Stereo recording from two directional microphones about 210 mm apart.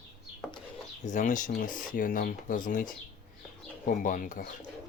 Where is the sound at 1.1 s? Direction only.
40° left (ahead or behind).